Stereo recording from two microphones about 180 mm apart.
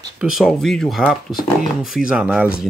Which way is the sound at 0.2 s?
Centre (ahead or behind).